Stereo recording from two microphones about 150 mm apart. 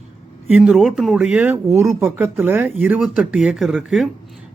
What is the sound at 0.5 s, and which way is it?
Speech, 5° right (ahead or behind).